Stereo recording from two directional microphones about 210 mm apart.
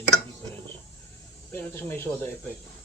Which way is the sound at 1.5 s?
10° left (ahead or behind).